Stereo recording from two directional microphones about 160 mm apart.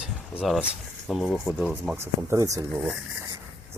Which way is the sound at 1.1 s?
Centre (ahead or behind).